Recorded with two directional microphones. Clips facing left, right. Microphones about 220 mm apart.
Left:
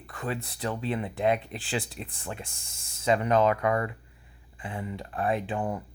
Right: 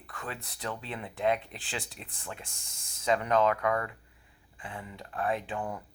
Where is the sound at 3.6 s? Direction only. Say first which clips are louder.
Left 3 dB; 20° left (ahead or behind).